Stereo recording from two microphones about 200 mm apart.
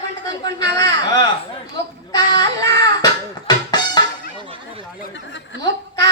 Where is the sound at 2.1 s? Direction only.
20° left (ahead or behind).